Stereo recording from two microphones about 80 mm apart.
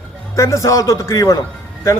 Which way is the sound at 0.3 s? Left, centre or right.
Left.